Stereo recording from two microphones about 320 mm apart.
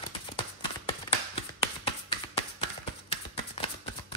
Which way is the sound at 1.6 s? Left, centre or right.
Centre.